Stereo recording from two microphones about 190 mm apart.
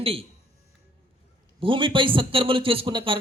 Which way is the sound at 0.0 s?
30° right (ahead or behind).